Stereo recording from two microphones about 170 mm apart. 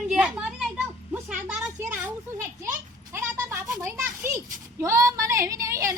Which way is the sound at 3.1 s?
15° right (ahead or behind).